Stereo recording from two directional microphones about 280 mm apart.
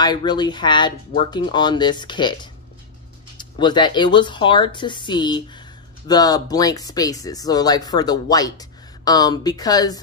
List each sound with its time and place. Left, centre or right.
0.0 s speech: centre